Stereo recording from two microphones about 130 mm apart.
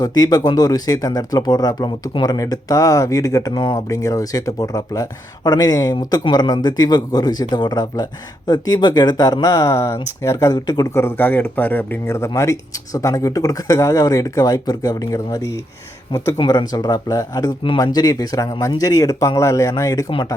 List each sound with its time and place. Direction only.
0.0 s speech: 30° left (ahead or behind)